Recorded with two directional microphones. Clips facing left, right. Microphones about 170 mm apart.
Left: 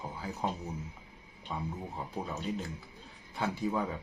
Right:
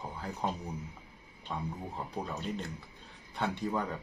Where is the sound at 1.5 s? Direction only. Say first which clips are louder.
Even; 5° left (ahead or behind).